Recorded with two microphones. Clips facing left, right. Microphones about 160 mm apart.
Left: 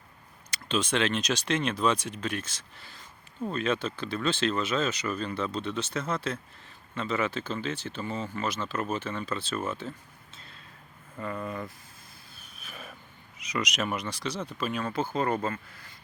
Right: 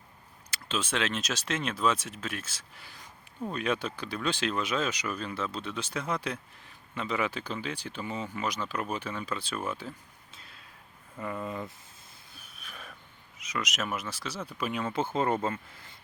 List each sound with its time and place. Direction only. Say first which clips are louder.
0.5 s speech: left 4 dB; 5° right (ahead or behind)
10.3 s a sound: left 1 dB; 5° right (ahead or behind)
11.2 s speech: left 1 dB; 15° right (ahead or behind)
12.5 s a sound: left 3 dB; 5° left (ahead or behind)
13.4 s speech: left 3 dB; centre (ahead or behind)
14.7 s speech: right 1 dB; 20° right (ahead or behind)